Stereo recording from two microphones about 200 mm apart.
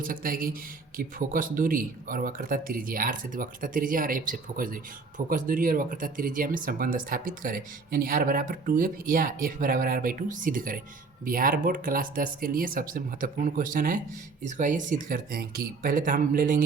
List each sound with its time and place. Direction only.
0.0 s speech: 45° right (ahead or behind)